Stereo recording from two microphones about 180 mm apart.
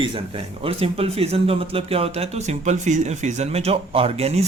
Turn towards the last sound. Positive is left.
turn(degrees=-35)  # may be behind; listen again after turning